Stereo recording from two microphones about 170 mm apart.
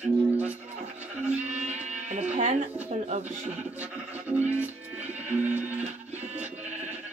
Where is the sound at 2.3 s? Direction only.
40° right (ahead or behind).